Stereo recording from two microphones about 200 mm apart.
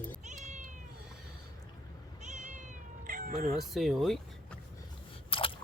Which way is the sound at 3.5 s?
Centre (ahead or behind).